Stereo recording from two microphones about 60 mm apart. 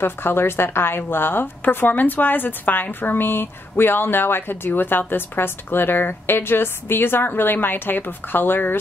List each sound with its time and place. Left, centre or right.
0.0 s a woman's voice: left